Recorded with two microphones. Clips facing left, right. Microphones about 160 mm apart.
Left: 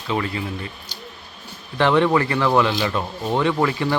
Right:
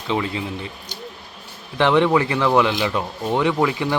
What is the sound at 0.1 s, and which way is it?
Speech, 20° right (ahead or behind).